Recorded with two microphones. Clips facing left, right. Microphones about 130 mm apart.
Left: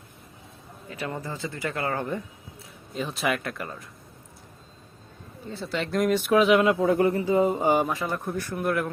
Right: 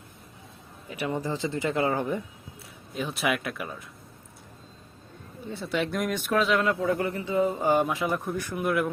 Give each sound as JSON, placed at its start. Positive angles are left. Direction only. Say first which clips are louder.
{"t": 1.0, "sound": "speech", "louder": "right 4 dB", "side_deg": -15}
{"t": 2.9, "sound": "speech", "louder": "left 1 dB", "side_deg": 0}
{"t": 5.5, "sound": "speech", "louder": "right 1 dB", "side_deg": 0}
{"t": 7.8, "sound": "speech", "louder": "right 1 dB", "side_deg": 0}